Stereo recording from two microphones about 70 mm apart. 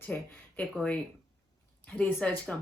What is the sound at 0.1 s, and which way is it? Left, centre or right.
Speech, left.